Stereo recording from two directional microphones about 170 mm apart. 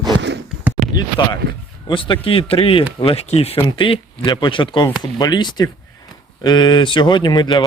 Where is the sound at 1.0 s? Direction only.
25° left (ahead or behind).